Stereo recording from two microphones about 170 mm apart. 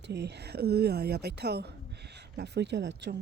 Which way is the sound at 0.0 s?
85° right.